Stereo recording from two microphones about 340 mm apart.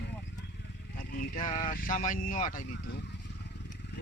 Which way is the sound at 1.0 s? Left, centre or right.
Left.